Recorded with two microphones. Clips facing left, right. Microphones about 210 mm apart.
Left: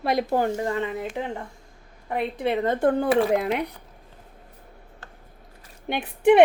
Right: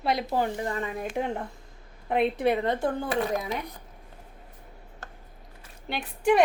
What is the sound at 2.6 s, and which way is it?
Speech, 60° left (ahead or behind).